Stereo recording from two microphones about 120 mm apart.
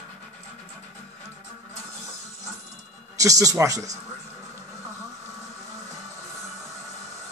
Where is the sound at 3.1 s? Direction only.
30° right (ahead or behind).